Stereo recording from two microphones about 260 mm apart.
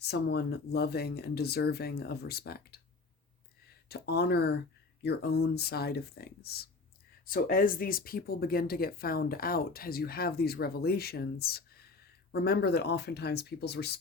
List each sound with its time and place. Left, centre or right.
0.0 s speech: left
3.8 s speech: left